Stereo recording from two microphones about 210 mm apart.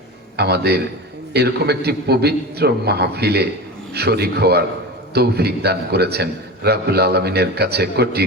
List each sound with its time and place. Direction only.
0.3 s a man's voice: 50° right (ahead or behind)